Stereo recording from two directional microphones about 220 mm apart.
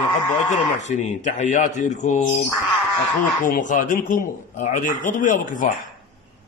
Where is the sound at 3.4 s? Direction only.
35° left (ahead or behind).